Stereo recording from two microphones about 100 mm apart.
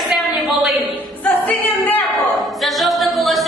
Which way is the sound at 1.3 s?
15° left (ahead or behind).